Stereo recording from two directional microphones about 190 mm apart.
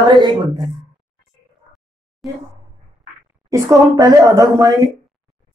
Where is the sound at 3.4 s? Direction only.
20° right (ahead or behind).